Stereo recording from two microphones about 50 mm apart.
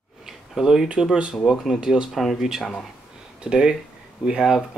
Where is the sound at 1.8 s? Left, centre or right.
Centre.